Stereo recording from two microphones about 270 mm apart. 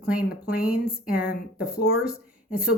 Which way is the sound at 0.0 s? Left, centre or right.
Centre.